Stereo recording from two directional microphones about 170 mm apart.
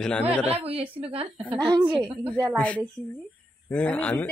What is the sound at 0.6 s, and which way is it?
A woman's voice, 35° right (ahead or behind).